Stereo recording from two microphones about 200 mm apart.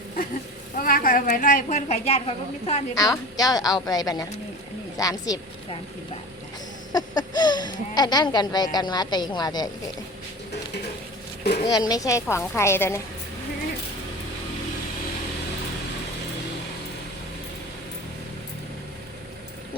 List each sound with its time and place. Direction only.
0.8 s a woman's voice: 45° left (ahead or behind)
2.9 s speech: 20° left (ahead or behind)
6.9 s speech: 20° left (ahead or behind)
11.7 s speech: 20° left (ahead or behind)